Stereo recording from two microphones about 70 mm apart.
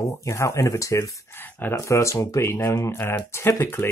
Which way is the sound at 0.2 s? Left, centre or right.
Left.